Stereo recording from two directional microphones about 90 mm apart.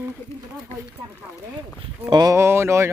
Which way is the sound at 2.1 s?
50° right (ahead or behind).